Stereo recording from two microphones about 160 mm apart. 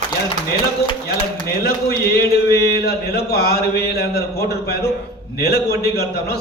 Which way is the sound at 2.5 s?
80° left.